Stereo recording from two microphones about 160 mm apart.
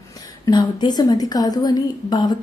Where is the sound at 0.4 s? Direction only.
25° left (ahead or behind).